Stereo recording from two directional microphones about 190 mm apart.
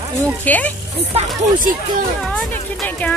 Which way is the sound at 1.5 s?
45° right (ahead or behind).